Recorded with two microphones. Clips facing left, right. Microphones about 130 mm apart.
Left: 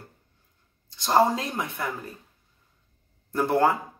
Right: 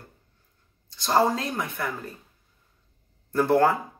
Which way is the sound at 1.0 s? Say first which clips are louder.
Left 1 dB; 20° left (ahead or behind).